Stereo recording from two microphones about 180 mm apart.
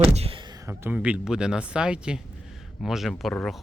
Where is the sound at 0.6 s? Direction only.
10° right (ahead or behind).